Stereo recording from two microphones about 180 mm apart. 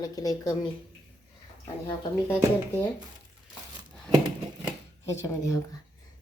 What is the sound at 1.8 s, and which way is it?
Speech, 10° left (ahead or behind).